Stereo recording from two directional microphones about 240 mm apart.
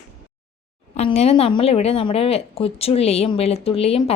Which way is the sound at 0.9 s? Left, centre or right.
Left.